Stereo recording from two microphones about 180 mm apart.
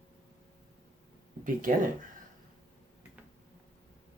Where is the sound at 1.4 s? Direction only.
50° right (ahead or behind).